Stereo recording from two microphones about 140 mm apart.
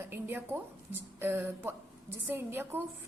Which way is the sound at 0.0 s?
15° right (ahead or behind).